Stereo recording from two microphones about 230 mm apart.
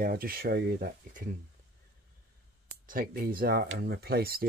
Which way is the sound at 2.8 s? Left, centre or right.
Right.